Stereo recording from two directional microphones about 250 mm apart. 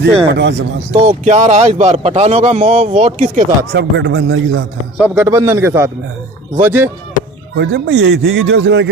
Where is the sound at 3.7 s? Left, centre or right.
Right.